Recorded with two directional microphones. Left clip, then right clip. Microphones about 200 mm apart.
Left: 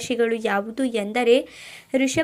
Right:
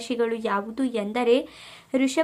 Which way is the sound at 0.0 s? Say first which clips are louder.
Left 3 dB; 5° left (ahead or behind).